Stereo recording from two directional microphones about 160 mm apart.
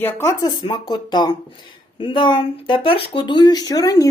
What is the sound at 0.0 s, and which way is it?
Speech, 15° left (ahead or behind).